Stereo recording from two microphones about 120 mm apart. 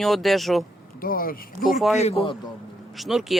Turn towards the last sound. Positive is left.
turn(degrees=0)  # may be behind; listen again after turning